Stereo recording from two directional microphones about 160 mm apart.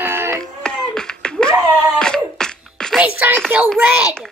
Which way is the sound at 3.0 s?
10° right (ahead or behind).